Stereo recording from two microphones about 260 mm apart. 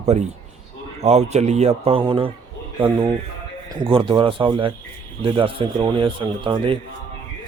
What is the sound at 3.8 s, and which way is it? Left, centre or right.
A man's voice, right.